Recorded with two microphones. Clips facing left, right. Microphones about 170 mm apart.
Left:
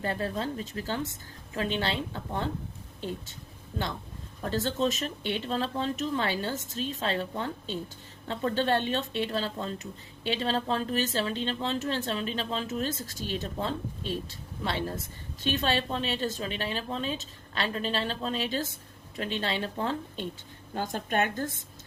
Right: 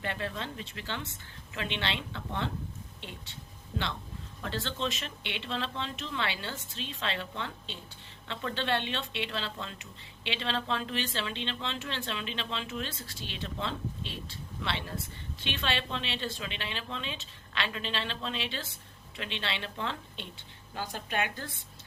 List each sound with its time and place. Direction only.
0.0 s speech: 40° left (ahead or behind)
4.4 s a woman's voice: 40° left (ahead or behind)